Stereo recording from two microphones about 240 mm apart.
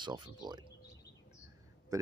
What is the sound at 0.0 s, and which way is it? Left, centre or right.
Speech, centre.